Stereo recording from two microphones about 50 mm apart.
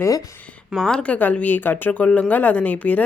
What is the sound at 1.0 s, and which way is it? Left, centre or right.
Speech, left.